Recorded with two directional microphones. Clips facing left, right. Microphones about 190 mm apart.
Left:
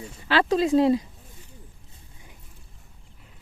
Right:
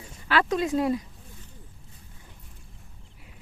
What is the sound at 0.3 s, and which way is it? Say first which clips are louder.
Speech: left 4 dB; 30° left (ahead or behind).